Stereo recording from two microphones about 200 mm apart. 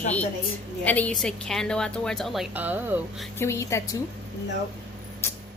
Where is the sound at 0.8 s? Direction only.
10° left (ahead or behind); by 3.3 s 10° right (ahead or behind).